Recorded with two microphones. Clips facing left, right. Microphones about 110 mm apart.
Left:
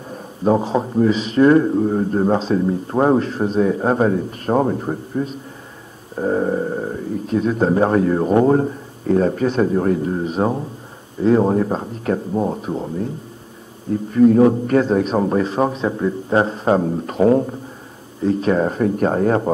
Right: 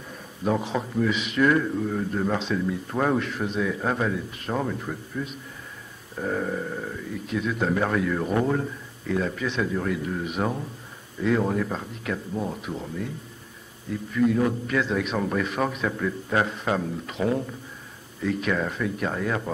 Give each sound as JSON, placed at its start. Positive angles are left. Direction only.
{"t": 0.1, "sound": "a man's voice", "side_deg": 35}